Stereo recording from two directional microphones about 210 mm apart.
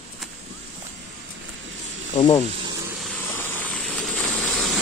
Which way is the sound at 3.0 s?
10° left (ahead or behind).